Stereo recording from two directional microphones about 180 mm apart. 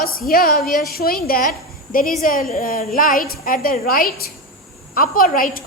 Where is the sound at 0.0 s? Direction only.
55° left (ahead or behind).